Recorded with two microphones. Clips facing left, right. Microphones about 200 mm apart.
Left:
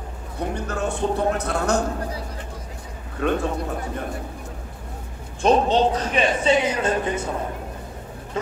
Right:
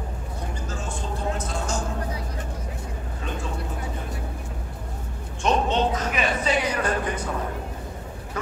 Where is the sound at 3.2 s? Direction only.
60° left (ahead or behind).